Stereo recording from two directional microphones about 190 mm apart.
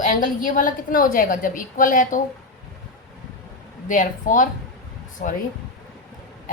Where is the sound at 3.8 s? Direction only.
45° left (ahead or behind).